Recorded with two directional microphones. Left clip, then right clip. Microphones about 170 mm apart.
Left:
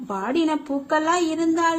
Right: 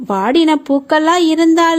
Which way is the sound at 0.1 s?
55° right (ahead or behind).